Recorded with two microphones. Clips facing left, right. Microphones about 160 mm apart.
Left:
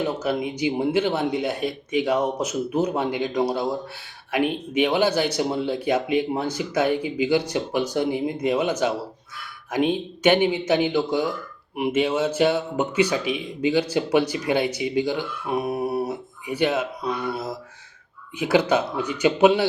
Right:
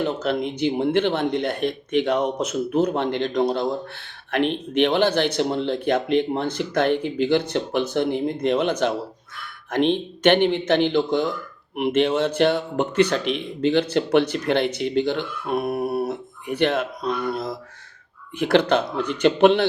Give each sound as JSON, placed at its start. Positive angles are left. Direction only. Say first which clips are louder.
{"t": 0.0, "sound": "speech", "louder": "right 1 dB", "side_deg": 10}